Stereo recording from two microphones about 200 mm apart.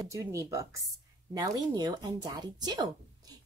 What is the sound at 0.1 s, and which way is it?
Speech, 15° right (ahead or behind).